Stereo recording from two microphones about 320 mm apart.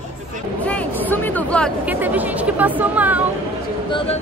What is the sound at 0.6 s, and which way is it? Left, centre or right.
Speech, centre.